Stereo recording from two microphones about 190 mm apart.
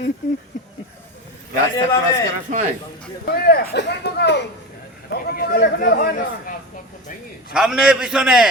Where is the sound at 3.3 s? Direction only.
55° left (ahead or behind).